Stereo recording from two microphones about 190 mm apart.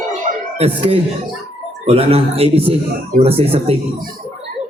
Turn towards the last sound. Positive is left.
turn(degrees=-30)  # may be behind; listen again after turning